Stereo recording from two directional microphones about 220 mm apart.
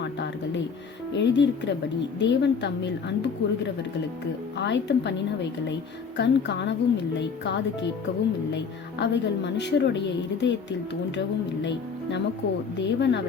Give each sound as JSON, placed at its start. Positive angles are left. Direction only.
{"t": 1.1, "sound": "a woman's voice", "side_deg": 55}
{"t": 12.8, "sound": "a woman's voice", "side_deg": 55}